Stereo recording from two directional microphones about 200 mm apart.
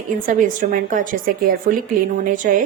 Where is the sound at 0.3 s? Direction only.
40° right (ahead or behind).